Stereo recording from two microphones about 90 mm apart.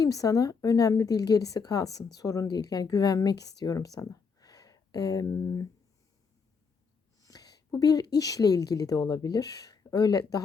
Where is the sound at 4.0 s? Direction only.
45° left (ahead or behind).